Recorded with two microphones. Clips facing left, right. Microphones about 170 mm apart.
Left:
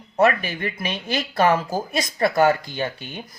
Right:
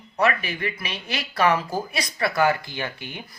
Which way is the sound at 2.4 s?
30° left (ahead or behind).